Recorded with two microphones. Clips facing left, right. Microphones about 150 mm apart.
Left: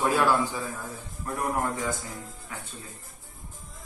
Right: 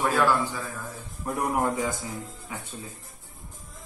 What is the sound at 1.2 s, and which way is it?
Speech, 20° right (ahead or behind).